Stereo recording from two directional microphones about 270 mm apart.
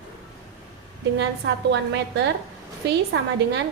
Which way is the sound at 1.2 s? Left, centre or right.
Right.